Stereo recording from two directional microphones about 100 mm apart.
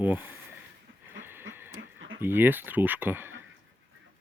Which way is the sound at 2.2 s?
20° right (ahead or behind).